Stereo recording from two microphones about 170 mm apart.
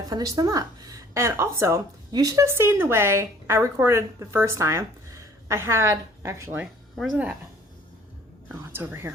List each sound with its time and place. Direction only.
0.1 s speech: 20° right (ahead or behind)
6.9 s speech: centre (ahead or behind)
8.4 s speech: 10° right (ahead or behind)